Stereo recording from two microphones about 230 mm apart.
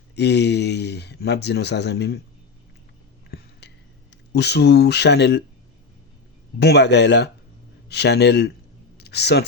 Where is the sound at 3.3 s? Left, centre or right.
Left.